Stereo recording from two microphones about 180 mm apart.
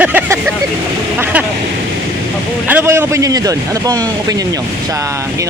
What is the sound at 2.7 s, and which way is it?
Speech, 15° right (ahead or behind).